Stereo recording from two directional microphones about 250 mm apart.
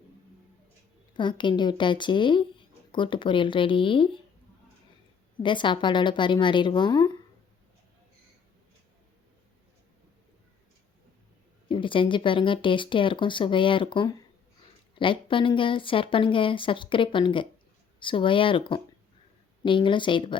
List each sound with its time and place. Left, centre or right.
1.1 s speech: centre
5.4 s speech: centre
11.7 s speech: centre